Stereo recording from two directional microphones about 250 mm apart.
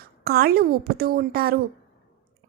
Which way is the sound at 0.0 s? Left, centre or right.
Right.